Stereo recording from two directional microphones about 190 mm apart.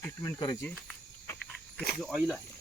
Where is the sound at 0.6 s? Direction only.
Centre (ahead or behind).